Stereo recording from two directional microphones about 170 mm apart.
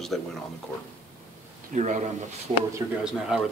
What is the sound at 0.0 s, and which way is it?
Speech, centre (ahead or behind).